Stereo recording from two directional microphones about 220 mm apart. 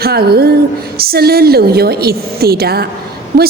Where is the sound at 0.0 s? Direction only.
45° right (ahead or behind).